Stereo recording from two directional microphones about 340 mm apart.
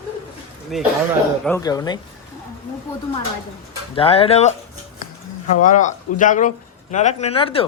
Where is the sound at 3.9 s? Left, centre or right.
Centre.